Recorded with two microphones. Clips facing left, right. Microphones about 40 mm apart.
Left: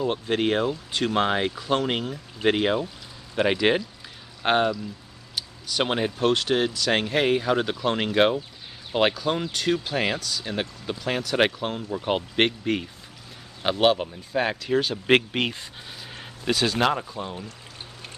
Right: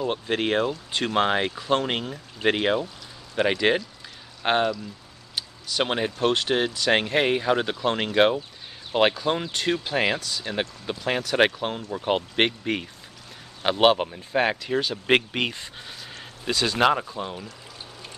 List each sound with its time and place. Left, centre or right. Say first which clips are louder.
0.0 s speech: left 1 dB; centre
13.7 s speech: right 2 dB; right
14.5 s speech: left 1 dB; centre
16.6 s speech: right 4 dB; centre